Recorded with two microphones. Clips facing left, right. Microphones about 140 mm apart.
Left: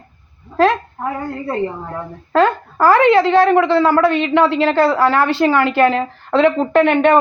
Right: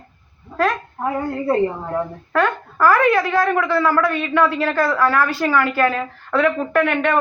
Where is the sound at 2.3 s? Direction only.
25° left (ahead or behind).